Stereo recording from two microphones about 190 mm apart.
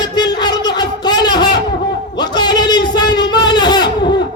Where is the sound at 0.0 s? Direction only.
20° left (ahead or behind).